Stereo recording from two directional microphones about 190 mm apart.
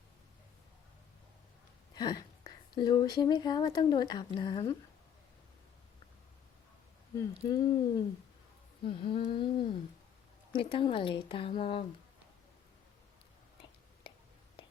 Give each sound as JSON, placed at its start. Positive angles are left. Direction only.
{"t": 2.0, "sound": "speech", "side_deg": 20}
{"t": 7.2, "sound": "speech", "side_deg": 20}